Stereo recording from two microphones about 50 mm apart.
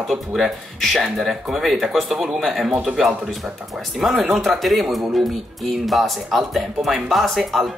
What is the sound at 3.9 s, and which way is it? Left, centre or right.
Speech, centre.